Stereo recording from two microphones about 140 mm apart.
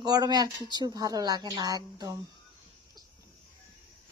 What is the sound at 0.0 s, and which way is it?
Speech, 30° right (ahead or behind).